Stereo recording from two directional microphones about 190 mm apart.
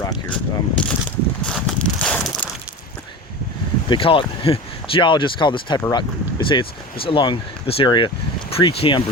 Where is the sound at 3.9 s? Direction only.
25° left (ahead or behind).